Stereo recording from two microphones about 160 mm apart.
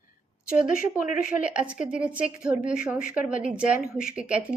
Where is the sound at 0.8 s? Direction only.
60° left (ahead or behind).